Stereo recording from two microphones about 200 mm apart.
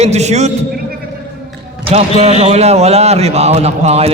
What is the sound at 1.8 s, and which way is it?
Speech, 30° right (ahead or behind).